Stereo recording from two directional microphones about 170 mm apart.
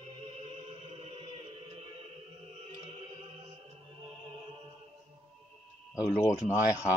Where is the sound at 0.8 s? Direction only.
35° right (ahead or behind).